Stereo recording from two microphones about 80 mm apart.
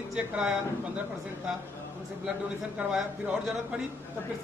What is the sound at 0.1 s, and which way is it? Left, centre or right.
Speech, centre.